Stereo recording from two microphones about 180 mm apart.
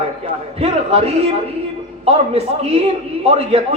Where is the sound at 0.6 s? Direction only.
35° right (ahead or behind).